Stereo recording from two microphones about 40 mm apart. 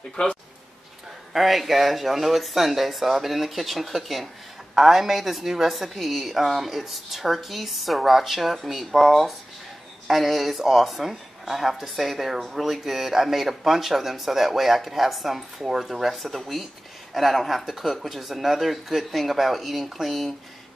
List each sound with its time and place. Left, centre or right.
0.2 s speech: left
1.3 s speech: centre